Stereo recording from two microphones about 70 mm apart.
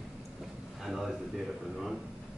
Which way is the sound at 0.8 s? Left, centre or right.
Centre.